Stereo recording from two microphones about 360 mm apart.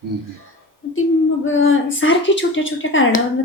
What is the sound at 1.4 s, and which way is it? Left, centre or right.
Speech, left.